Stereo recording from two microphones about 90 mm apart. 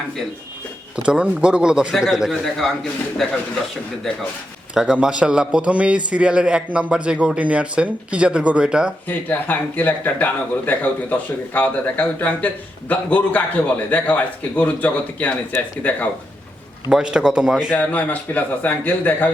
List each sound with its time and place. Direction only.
1.0 s a man's voice: 10° right (ahead or behind)
2.3 s a man's voice: 5° left (ahead or behind)
4.7 s a man's voice: 10° right (ahead or behind)
9.0 s a man's voice: 20° left (ahead or behind)
16.9 s a man's voice: 10° right (ahead or behind)
17.7 s speech: 20° left (ahead or behind)